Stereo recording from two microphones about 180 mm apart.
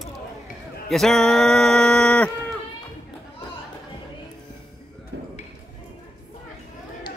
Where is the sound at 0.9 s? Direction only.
Centre (ahead or behind).